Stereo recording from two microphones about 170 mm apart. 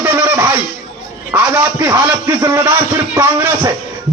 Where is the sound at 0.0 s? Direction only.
15° right (ahead or behind).